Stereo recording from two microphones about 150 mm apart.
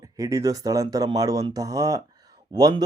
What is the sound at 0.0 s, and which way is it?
Speech, 25° right (ahead or behind).